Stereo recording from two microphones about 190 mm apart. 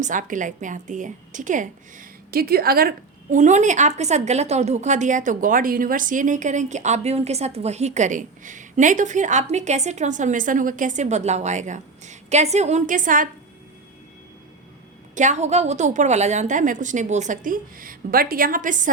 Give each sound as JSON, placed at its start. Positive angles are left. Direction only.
{"t": 0.0, "sound": "a woman's voice", "side_deg": -45}
{"t": 15.1, "sound": "a woman's voice", "side_deg": -40}